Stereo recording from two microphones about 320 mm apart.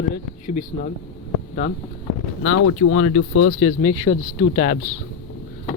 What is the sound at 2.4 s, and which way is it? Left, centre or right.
Speech, left.